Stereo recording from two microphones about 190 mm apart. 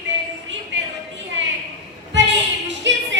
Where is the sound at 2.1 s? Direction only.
70° right (ahead or behind).